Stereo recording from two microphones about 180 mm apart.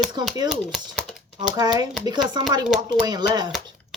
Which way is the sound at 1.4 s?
25° right (ahead or behind).